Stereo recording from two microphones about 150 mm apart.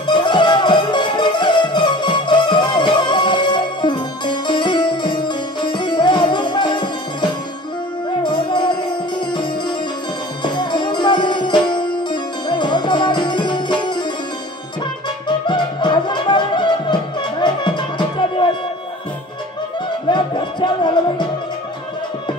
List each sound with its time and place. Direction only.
0.0 s music: 30° left (ahead or behind)
15.2 s music: 30° left (ahead or behind)
20.1 s music: 30° left (ahead or behind)